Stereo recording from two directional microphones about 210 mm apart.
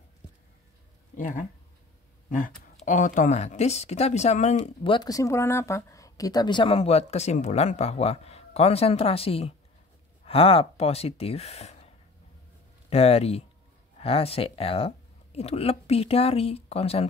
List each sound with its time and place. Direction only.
1.1 s speech: 40° left (ahead or behind)
12.9 s speech: 30° left (ahead or behind)